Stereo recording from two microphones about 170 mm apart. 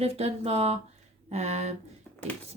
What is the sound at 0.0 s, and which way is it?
Speech, 35° right (ahead or behind).